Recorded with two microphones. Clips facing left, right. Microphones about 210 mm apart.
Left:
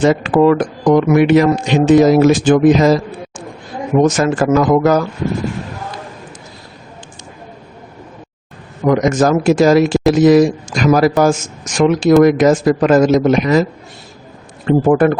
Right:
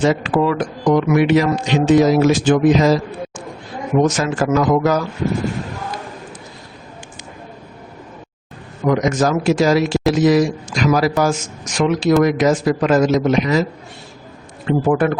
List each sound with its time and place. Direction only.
0.0 s speech: 50° left (ahead or behind)
4.0 s speech: 55° left (ahead or behind)
8.9 s speech: 50° left (ahead or behind)
14.7 s speech: 50° left (ahead or behind)